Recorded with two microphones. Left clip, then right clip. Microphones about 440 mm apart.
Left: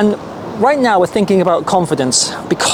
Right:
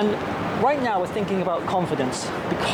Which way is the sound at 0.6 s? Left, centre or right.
Left.